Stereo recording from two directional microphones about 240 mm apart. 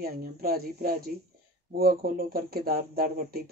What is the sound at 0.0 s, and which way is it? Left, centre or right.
Speech, right.